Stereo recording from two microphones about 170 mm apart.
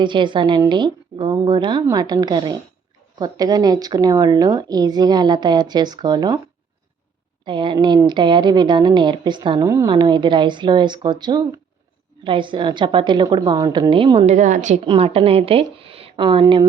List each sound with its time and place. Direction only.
0.0 s a woman's voice: 30° right (ahead or behind)
7.4 s a woman's voice: 30° right (ahead or behind)
13.9 s a woman's voice: 30° right (ahead or behind); by 14.8 s 45° right (ahead or behind)
14.8 s a woman's voice: 35° right (ahead or behind)